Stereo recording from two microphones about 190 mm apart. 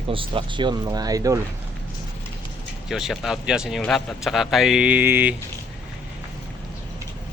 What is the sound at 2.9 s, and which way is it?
Speech, centre (ahead or behind).